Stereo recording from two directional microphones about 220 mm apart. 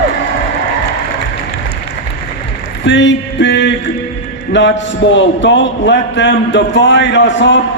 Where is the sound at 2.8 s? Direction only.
55° left (ahead or behind).